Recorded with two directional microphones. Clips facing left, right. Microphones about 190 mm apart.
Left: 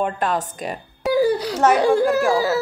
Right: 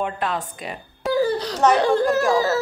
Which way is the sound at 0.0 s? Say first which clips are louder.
Left 3 dB; 45° left (ahead or behind).